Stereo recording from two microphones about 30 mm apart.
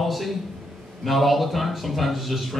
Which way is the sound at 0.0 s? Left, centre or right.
Centre.